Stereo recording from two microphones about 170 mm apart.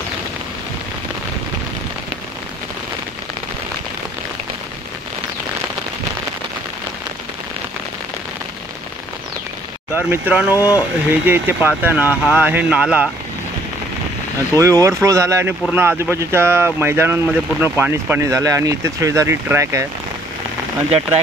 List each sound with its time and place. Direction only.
9.9 s speech: 10° right (ahead or behind)
14.6 s speech: 20° right (ahead or behind)